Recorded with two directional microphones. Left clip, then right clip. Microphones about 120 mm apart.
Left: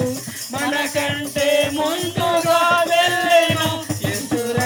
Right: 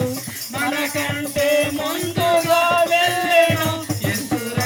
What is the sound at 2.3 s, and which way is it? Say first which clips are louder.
Music: left 1 dB; 20° left (ahead or behind).